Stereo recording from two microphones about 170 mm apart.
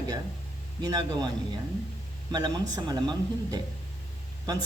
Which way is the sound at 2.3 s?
25° right (ahead or behind).